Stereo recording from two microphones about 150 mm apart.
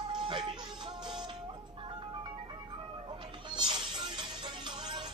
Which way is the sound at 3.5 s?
30° right (ahead or behind).